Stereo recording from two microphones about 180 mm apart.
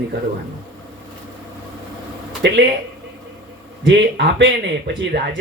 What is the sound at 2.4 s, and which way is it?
Speech, 75° right (ahead or behind).